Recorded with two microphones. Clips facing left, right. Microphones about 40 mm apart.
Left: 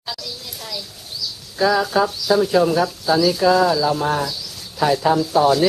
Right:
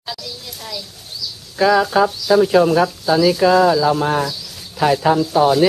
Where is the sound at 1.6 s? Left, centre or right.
Centre.